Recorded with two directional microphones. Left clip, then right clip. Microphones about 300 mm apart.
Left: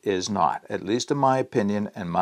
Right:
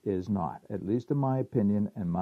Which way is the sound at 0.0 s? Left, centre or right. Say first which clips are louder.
Left 10 dB; centre.